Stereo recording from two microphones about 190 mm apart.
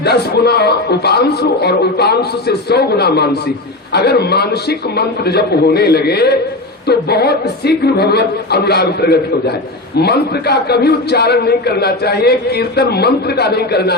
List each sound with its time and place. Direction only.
0.0 s a man's voice: 60° left (ahead or behind)